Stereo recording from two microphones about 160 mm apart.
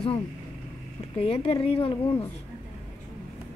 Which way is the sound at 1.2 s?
35° left (ahead or behind).